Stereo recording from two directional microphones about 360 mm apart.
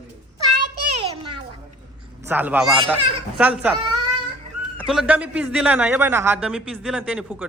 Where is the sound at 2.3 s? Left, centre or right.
Centre.